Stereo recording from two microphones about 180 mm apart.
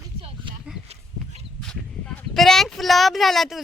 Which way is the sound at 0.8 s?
35° right (ahead or behind).